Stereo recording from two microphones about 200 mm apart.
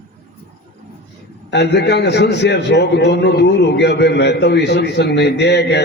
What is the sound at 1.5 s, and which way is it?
A man's voice, 60° left (ahead or behind).